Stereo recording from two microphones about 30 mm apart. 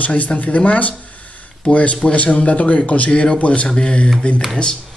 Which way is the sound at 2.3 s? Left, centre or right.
Left.